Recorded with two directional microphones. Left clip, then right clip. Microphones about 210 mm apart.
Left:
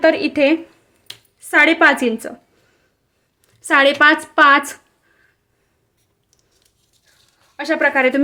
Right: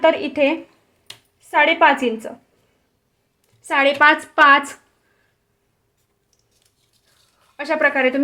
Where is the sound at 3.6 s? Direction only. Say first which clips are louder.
Left 2 dB; 20° left (ahead or behind).